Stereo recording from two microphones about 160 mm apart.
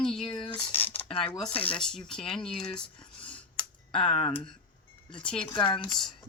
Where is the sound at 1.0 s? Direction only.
35° left (ahead or behind).